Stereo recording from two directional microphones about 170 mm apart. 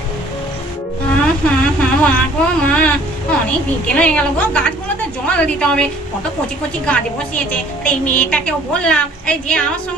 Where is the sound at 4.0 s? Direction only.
10° left (ahead or behind).